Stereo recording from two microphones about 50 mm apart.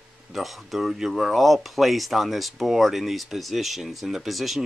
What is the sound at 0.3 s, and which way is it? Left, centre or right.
Speech, centre.